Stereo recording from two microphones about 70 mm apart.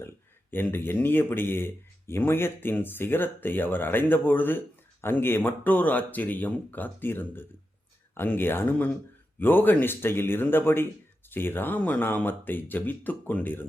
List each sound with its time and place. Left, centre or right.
0.5 s speech: left